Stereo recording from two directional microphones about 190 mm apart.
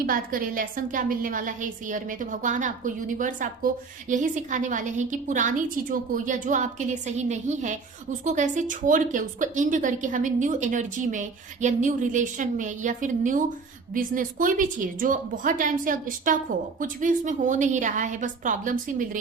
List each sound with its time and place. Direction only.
0.0 s a woman's voice: 50° right (ahead or behind)